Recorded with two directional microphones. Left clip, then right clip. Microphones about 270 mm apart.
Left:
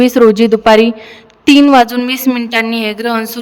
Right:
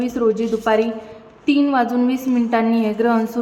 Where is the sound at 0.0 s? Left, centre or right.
Left.